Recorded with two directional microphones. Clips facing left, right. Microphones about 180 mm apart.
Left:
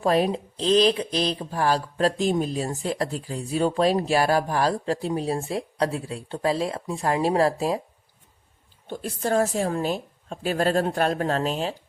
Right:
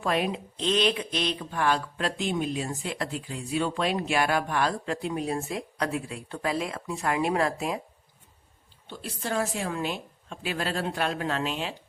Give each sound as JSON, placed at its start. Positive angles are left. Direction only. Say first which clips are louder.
{"t": 0.0, "sound": "speech", "louder": "left 6 dB", "side_deg": 35}
{"t": 8.9, "sound": "a woman's voice", "louder": "left 7 dB", "side_deg": 45}